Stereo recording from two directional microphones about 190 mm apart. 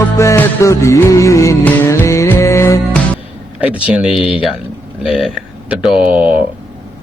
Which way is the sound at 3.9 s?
5° right (ahead or behind).